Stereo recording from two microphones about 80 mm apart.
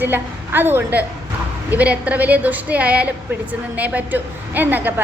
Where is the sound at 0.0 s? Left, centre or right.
Right.